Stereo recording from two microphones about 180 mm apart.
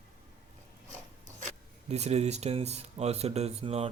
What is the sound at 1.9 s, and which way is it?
Speech, 35° right (ahead or behind).